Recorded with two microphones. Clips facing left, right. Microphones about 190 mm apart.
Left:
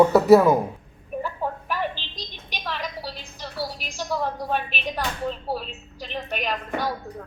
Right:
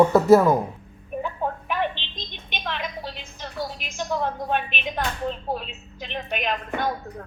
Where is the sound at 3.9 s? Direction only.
20° right (ahead or behind).